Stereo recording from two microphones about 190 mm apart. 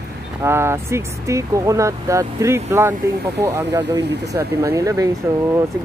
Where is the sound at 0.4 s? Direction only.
15° right (ahead or behind).